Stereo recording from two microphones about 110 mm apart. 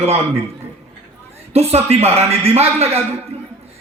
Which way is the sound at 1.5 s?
70° right (ahead or behind).